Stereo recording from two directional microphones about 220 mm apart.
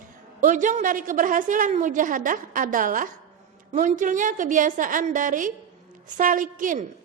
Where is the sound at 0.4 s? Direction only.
35° right (ahead or behind).